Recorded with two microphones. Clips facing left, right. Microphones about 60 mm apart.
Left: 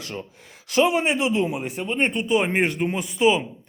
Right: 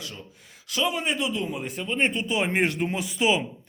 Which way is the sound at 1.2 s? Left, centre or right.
Left.